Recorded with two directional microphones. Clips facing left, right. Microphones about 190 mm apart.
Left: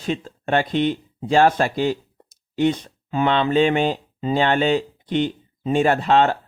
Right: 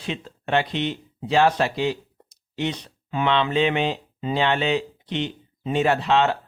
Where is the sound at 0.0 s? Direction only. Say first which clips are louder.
Left 5 dB; 45° left (ahead or behind).